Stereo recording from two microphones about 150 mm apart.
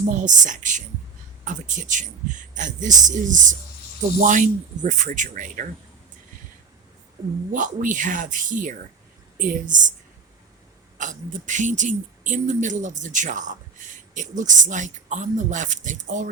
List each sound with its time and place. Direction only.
0.2 s speech: 55° right (ahead or behind)
7.2 s speech: 30° right (ahead or behind)
7.5 s speech: 60° right (ahead or behind)
10.9 s speech: 55° right (ahead or behind)